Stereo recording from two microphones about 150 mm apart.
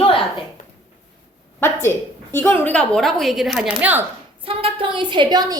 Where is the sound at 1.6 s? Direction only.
15° left (ahead or behind); by 4.0 s 10° right (ahead or behind).